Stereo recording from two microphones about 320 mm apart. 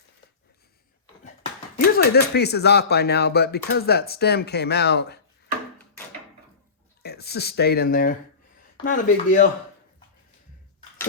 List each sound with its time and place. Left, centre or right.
2.0 s speech: left
7.0 s speech: left